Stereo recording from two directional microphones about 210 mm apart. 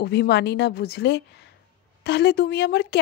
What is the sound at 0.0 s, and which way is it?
Speech, 50° left (ahead or behind).